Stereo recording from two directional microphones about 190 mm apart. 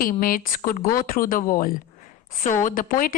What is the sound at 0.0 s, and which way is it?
A woman's voice, 50° left (ahead or behind).